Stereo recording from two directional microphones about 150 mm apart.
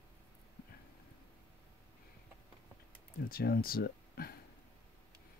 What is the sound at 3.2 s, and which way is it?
Speech, 85° left.